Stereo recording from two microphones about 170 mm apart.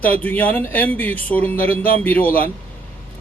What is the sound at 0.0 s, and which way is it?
A man's voice, 10° left (ahead or behind).